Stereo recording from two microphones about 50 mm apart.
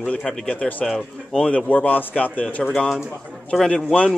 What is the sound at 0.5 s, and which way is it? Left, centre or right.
Speech, left.